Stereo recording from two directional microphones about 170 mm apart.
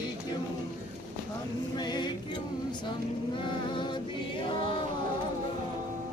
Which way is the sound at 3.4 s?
30° left (ahead or behind).